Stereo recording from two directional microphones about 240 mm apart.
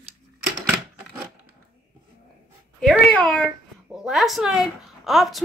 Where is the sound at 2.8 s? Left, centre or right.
Centre.